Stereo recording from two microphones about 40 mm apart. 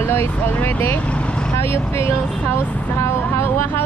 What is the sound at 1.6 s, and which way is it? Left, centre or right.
Speech, left.